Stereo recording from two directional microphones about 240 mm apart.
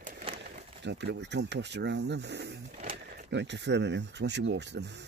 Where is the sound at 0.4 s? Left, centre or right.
Right.